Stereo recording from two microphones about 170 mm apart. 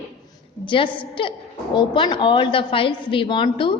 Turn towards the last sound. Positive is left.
turn(degrees=30)  # may be behind; listen again after turning